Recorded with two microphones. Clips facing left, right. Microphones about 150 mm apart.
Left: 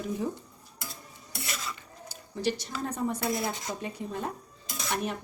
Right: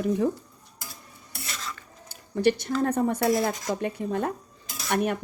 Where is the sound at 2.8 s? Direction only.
60° right (ahead or behind).